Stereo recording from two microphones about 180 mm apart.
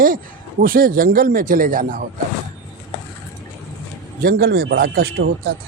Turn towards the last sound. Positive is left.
turn(degrees=-60)  # may be behind; listen again after turning